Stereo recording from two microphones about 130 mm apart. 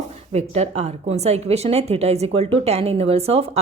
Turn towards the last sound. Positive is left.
turn(degrees=-50)  # may be behind; listen again after turning